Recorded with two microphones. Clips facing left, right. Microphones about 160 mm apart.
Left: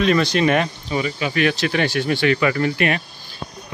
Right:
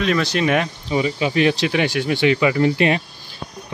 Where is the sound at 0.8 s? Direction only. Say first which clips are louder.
Right 3 dB; 20° right (ahead or behind).